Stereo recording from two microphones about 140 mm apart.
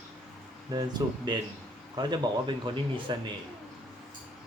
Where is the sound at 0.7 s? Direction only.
30° right (ahead or behind).